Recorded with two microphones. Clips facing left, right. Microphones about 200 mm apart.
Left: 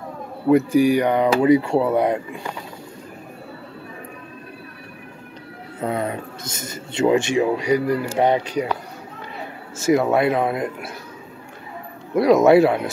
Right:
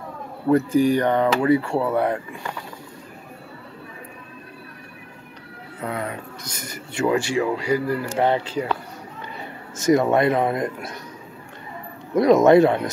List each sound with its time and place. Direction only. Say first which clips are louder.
0.5 s speech: left 2 dB; 10° left (ahead or behind)
5.8 s speech: left 5 dB; 25° left (ahead or behind)
9.8 s speech: even; 5° left (ahead or behind)
12.2 s speech: even; 5° left (ahead or behind)